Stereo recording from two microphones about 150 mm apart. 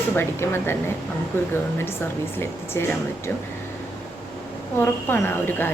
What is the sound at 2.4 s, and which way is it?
Speech, 15° left (ahead or behind).